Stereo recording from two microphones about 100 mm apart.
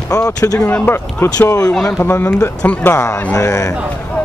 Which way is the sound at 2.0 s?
25° left (ahead or behind).